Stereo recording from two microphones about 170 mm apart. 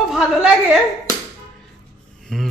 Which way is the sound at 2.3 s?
5° left (ahead or behind).